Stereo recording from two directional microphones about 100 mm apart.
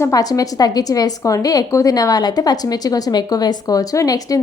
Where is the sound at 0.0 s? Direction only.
35° left (ahead or behind).